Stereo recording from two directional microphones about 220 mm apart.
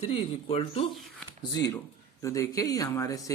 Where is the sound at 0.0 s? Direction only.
25° left (ahead or behind).